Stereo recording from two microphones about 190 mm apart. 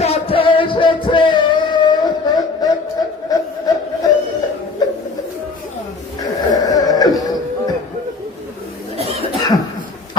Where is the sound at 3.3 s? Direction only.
20° left (ahead or behind).